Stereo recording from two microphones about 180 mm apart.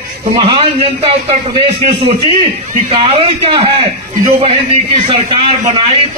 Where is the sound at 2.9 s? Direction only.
30° right (ahead or behind).